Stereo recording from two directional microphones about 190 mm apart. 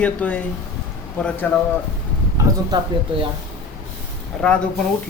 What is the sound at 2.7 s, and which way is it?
Speech, 20° right (ahead or behind).